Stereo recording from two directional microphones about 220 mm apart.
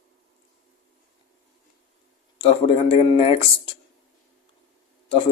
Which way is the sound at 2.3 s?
25° left (ahead or behind).